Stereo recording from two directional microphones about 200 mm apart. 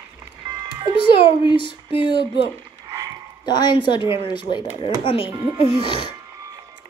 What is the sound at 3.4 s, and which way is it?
Speech, 20° left (ahead or behind).